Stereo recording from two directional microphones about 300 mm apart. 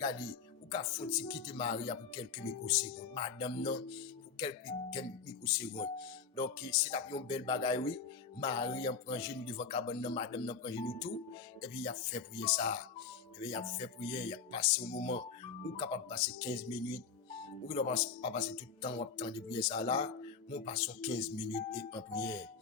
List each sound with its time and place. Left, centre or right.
0.7 s speech: centre